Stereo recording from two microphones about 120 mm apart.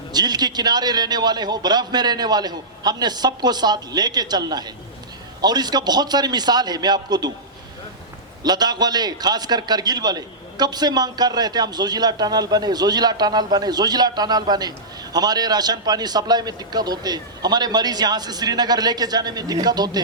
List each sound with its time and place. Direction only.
0.1 s a man's voice: 35° right (ahead or behind)
8.4 s a man's voice: 35° right (ahead or behind)